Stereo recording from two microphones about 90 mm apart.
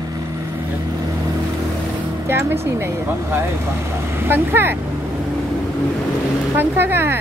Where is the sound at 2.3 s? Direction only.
25° right (ahead or behind).